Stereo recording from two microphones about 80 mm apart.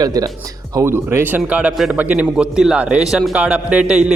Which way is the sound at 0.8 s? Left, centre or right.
Right.